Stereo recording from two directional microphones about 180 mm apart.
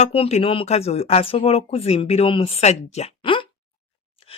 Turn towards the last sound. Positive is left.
turn(degrees=30)  # may be behind; listen again after turning